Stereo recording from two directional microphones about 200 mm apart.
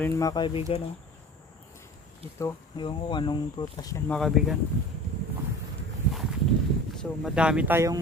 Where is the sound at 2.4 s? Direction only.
25° left (ahead or behind); by 4.5 s centre (ahead or behind).